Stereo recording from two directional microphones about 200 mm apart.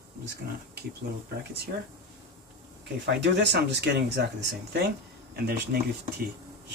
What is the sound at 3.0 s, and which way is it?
Speech, 60° right (ahead or behind).